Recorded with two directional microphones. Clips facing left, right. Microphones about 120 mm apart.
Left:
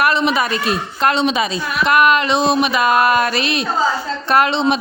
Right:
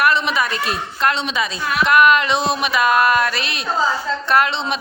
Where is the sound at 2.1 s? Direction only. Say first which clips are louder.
Left 2 dB; 5° right (ahead or behind).